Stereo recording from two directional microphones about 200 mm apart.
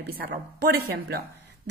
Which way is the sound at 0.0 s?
55° right (ahead or behind).